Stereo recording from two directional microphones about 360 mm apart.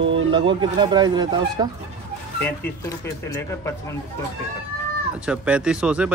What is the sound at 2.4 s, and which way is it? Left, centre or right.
Speech, centre.